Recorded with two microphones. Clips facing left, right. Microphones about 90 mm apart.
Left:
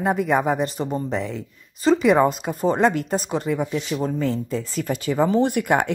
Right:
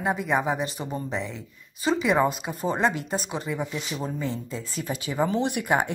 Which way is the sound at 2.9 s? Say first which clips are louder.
Left 6 dB; 45° left (ahead or behind).